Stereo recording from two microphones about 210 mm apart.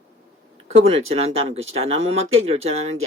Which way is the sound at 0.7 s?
30° right (ahead or behind).